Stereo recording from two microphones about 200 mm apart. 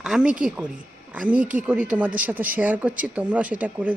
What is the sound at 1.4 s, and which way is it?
Speech, 40° right (ahead or behind).